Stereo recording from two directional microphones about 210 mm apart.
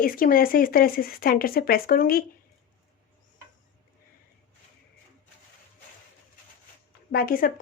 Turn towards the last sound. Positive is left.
turn(degrees=45)  # may be behind; listen again after turning